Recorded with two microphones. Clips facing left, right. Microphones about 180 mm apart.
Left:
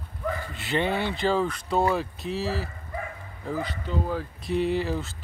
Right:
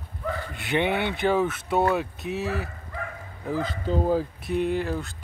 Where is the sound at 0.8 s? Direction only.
60° right (ahead or behind).